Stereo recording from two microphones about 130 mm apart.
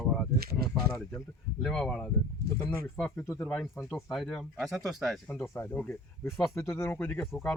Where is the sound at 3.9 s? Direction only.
Centre (ahead or behind).